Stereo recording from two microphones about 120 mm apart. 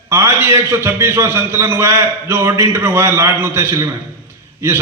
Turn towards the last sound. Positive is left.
turn(degrees=-20)  # may be behind; listen again after turning